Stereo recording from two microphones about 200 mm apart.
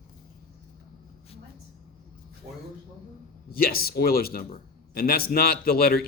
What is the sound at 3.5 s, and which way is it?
A man's voice, 50° left (ahead or behind).